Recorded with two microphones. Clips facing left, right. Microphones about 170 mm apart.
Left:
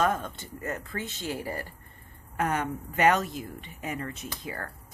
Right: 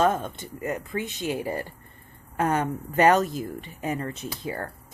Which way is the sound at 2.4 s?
35° right (ahead or behind).